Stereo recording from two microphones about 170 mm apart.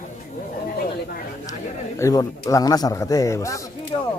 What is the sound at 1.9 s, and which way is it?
Speech, 20° left (ahead or behind).